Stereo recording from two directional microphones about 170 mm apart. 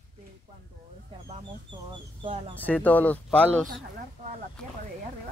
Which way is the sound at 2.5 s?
10° left (ahead or behind).